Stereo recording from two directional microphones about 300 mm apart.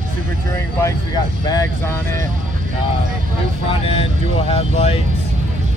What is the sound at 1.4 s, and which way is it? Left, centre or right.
Speech, centre.